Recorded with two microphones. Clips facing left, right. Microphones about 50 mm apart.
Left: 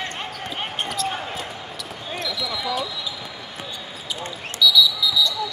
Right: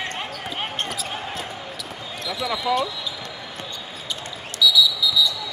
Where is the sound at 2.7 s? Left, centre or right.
Right.